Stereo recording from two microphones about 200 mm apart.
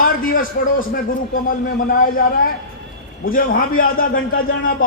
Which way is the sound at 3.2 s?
45° left (ahead or behind).